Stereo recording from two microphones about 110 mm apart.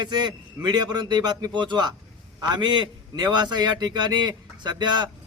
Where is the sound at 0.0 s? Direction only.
40° right (ahead or behind).